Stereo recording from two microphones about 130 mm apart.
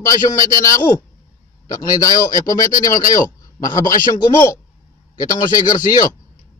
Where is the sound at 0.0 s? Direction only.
25° left (ahead or behind).